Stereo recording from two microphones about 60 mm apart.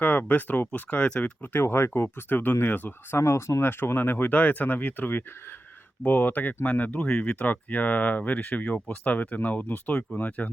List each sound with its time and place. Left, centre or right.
0.0 s speech: left
1.6 s speech: left
3.2 s speech: left